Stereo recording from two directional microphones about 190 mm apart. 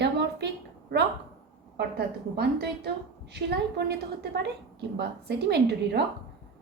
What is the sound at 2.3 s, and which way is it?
A woman's voice, 60° right (ahead or behind).